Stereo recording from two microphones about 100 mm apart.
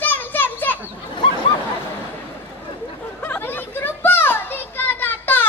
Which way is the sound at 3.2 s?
20° left (ahead or behind).